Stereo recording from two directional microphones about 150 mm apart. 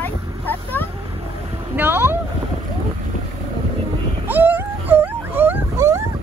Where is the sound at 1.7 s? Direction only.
15° right (ahead or behind).